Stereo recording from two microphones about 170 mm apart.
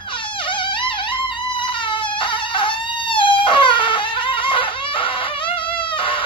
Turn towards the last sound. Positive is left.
turn(degrees=30)  # may be behind; listen again after turning